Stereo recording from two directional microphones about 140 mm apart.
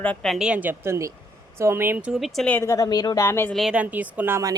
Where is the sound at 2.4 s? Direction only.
15° left (ahead or behind).